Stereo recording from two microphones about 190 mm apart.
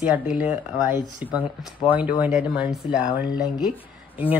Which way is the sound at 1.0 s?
25° left (ahead or behind).